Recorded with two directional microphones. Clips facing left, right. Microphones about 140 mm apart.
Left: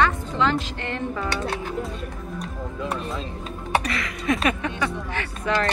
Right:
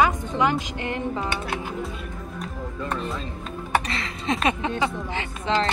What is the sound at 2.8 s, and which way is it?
Speech, centre (ahead or behind).